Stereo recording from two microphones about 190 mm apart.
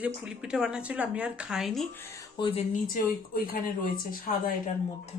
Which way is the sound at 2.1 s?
25° left (ahead or behind).